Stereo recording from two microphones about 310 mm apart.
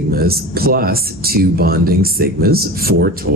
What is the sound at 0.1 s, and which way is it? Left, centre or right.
Speech, right.